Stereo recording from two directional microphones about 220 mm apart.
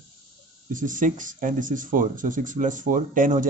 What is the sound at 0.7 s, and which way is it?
Speech, 35° right (ahead or behind).